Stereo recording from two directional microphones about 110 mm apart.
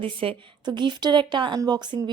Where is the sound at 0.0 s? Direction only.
55° right (ahead or behind).